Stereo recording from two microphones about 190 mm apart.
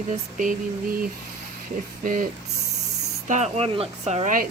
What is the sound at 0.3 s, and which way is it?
Speech, 45° right (ahead or behind).